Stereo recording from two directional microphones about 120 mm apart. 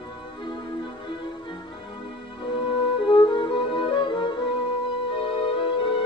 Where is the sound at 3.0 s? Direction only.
45° left (ahead or behind).